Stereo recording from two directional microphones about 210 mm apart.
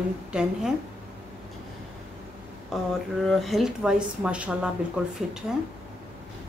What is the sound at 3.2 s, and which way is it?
A woman's voice, centre (ahead or behind).